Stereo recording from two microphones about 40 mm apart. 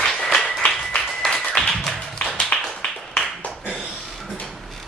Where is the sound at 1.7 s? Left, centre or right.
Centre.